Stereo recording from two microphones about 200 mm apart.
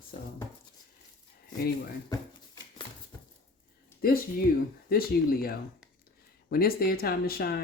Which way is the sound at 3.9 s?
10° left (ahead or behind).